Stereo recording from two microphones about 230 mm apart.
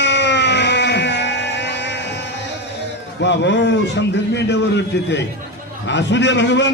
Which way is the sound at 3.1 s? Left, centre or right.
Left.